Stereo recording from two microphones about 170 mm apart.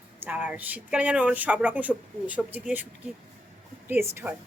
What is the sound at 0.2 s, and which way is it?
Speech, 10° right (ahead or behind).